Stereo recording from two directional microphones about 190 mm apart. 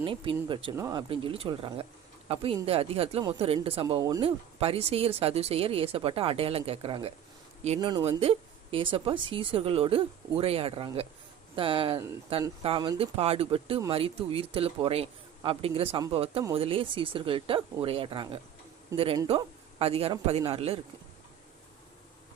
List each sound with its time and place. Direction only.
0.0 s speech: 25° right (ahead or behind)